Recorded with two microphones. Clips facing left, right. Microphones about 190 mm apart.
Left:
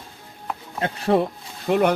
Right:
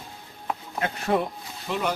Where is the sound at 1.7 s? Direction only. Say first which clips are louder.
Left 9 dB; 60° left (ahead or behind).